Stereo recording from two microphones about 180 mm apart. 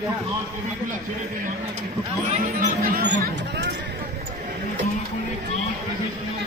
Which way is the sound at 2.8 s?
65° right (ahead or behind).